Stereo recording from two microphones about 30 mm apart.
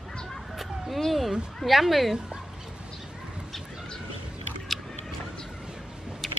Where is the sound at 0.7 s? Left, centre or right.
Centre.